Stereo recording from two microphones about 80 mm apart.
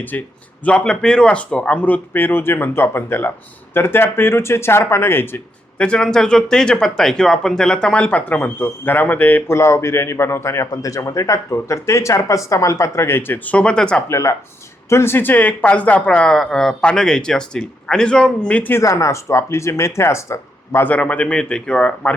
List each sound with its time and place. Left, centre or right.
0.1 s speech: left
5.7 s speech: centre
9.5 s speech: left
10.7 s speech: left; by 14.0 s centre
14.1 s speech: left; by 18.7 s centre
18.8 s speech: left
20.8 s speech: centre